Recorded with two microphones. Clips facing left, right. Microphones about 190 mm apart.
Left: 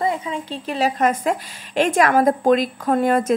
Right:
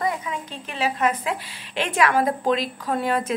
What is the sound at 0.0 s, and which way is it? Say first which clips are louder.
A woman's voice: left 4 dB; 25° left (ahead or behind).